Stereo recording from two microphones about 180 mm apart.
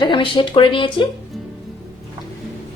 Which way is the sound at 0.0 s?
25° left (ahead or behind).